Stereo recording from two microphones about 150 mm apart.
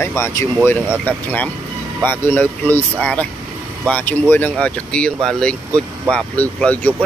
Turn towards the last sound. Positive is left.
turn(degrees=10)  # may be behind; listen again after turning